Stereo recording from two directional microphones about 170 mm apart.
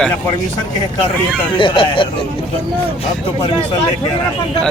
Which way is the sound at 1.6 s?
30° left (ahead or behind).